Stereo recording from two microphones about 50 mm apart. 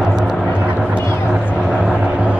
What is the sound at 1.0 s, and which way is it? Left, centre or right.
Vehicle, left.